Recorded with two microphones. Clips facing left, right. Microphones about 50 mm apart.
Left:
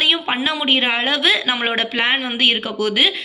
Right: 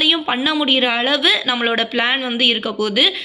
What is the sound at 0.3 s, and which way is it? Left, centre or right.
A woman's voice, left.